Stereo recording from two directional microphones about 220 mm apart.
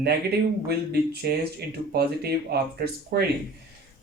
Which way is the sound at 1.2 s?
45° right (ahead or behind).